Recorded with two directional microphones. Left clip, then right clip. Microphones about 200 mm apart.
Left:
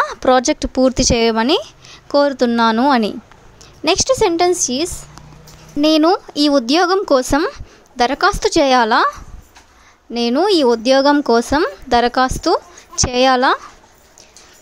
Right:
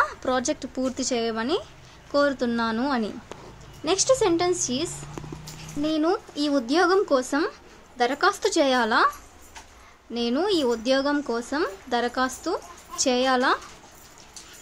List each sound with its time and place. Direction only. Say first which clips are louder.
0.0 s a woman's voice: left 10 dB; 45° left (ahead or behind)
10.1 s speech: left 10 dB; 40° left (ahead or behind)